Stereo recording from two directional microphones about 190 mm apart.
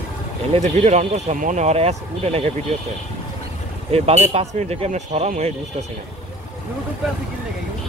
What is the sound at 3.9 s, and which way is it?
Speech, 35° right (ahead or behind).